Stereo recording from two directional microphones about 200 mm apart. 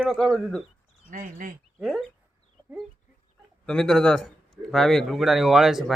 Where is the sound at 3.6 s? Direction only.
5° left (ahead or behind).